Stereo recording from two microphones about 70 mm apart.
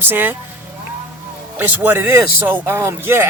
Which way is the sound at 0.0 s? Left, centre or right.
Right.